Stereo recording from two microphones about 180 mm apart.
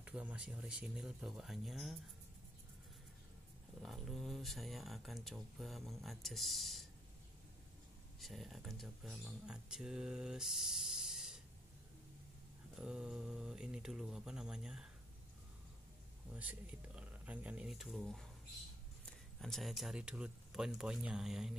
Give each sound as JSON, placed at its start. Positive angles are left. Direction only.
{"t": 0.0, "sound": "speech", "side_deg": -5}
{"t": 3.8, "sound": "speech", "side_deg": 0}
{"t": 8.2, "sound": "speech", "side_deg": 0}
{"t": 12.7, "sound": "speech", "side_deg": -5}
{"t": 16.3, "sound": "speech", "side_deg": -10}
{"t": 19.4, "sound": "speech", "side_deg": 0}